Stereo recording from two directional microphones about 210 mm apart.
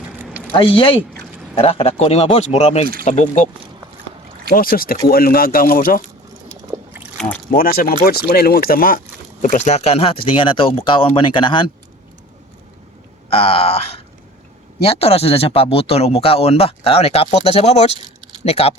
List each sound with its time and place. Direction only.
0.5 s speech: 25° left (ahead or behind)
4.5 s speech: 45° left (ahead or behind)
7.5 s speech: 45° left (ahead or behind); by 11.7 s 25° left (ahead or behind)
13.3 s speech: 30° left (ahead or behind)
14.8 s speech: 30° left (ahead or behind)